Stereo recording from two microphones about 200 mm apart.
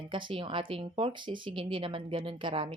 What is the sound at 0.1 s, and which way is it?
Speech, 25° right (ahead or behind).